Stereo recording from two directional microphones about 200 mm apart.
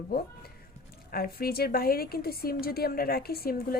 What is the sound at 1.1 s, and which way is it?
A woman's voice, 50° left (ahead or behind).